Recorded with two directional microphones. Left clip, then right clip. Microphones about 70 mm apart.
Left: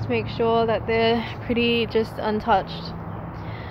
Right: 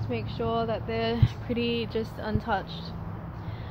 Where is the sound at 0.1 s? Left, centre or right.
Left.